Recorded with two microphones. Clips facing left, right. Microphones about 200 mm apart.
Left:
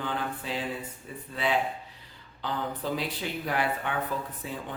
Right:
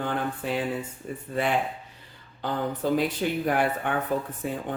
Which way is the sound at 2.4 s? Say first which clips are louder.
Right 5 dB; 50° right (ahead or behind).